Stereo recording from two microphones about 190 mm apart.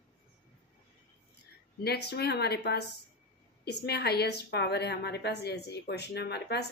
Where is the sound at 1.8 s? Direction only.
60° left (ahead or behind).